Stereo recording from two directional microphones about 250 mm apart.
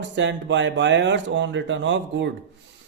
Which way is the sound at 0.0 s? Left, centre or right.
Right.